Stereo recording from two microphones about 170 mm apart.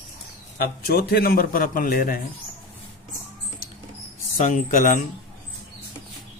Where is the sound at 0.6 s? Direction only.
65° left (ahead or behind).